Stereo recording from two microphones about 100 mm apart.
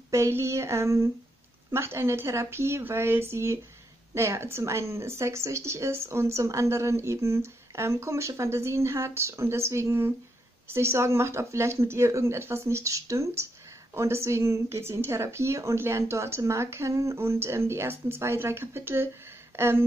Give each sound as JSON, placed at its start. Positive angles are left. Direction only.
{"t": 0.1, "sound": "speech", "side_deg": -30}